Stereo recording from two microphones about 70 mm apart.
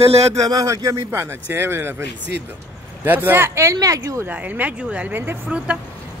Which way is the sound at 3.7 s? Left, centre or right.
Right.